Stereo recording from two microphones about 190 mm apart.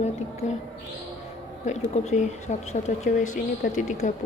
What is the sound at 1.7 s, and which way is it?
Speech, 35° left (ahead or behind).